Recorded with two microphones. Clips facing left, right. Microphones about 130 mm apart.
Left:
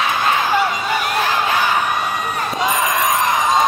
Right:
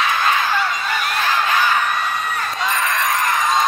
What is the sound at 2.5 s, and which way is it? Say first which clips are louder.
Crowd: left 4 dB; 15° left (ahead or behind).